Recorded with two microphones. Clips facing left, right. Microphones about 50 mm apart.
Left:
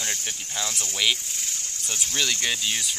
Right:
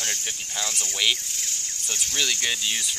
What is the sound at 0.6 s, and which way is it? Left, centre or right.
Speech, centre.